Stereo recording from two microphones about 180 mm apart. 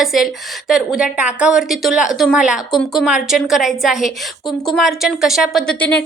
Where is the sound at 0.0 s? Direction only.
Centre (ahead or behind).